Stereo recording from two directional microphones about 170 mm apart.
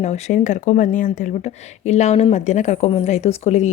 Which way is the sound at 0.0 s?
40° left (ahead or behind).